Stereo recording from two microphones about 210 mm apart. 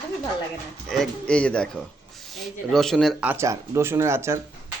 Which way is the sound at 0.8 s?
Centre (ahead or behind).